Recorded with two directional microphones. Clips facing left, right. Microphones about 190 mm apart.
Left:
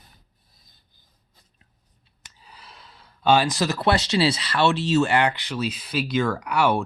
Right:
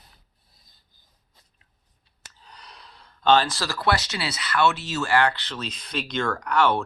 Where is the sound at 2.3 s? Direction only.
5° left (ahead or behind).